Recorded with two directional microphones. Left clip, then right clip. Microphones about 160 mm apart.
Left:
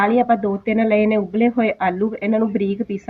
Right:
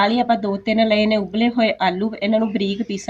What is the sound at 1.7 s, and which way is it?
Speech, 25° right (ahead or behind).